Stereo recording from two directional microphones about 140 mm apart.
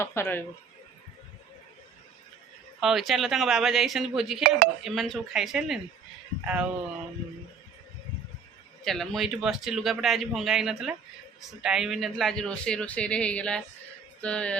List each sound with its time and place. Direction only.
0.0 s speech: 20° left (ahead or behind)
2.8 s a man's voice: centre (ahead or behind)
8.8 s a man's voice: centre (ahead or behind)